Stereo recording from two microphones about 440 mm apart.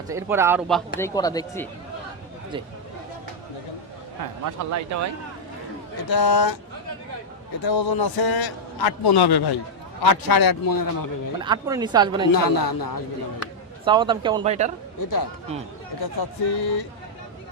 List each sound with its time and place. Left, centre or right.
0.1 s speech: centre
0.9 s speech: centre
4.4 s speech: right
6.1 s a man's voice: left
7.6 s a man's voice: left
11.3 s speech: centre
12.3 s a man's voice: left
13.8 s speech: centre
14.9 s a man's voice: left